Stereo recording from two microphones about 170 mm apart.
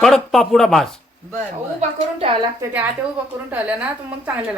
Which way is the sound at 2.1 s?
30° right (ahead or behind).